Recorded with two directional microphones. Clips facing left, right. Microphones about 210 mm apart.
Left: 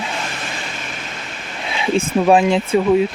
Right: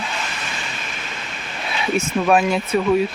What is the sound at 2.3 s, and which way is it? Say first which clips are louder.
Speech: left 4 dB; 25° left (ahead or behind).